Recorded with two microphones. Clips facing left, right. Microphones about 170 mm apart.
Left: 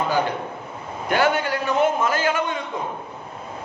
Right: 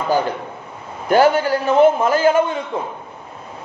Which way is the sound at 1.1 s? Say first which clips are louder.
Right 7 dB; 35° right (ahead or behind).